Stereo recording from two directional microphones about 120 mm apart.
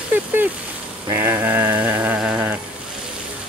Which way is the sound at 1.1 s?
20° right (ahead or behind).